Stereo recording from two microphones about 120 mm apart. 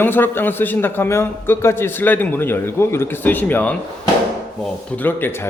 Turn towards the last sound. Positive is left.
turn(degrees=20)  # may be behind; listen again after turning